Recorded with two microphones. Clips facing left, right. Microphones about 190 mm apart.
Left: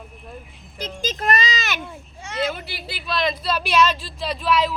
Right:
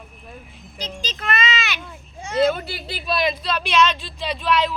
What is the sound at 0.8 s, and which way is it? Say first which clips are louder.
A child's voice: left 4 dB; 45° left (ahead or behind).